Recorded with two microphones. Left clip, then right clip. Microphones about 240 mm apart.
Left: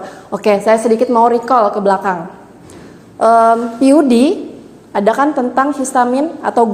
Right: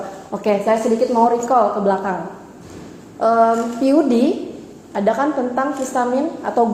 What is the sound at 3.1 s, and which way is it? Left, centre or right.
A woman's voice, left.